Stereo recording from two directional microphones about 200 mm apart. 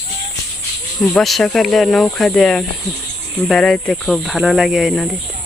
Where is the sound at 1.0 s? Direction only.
Centre (ahead or behind).